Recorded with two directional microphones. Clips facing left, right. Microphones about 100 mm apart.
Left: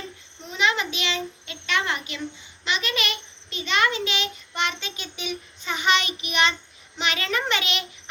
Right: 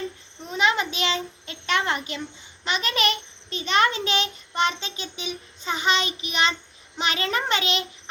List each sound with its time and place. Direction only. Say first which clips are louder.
0.5 s a child's voice: right 2 dB; 35° right (ahead or behind)